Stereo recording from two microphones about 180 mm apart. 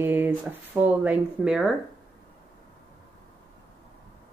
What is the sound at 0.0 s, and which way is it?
Speech, 10° right (ahead or behind).